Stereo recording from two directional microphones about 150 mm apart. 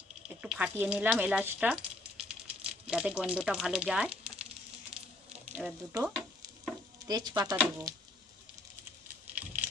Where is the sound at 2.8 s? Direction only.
5° right (ahead or behind).